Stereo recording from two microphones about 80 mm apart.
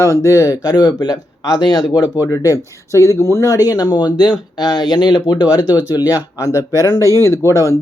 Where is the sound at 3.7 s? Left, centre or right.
Left.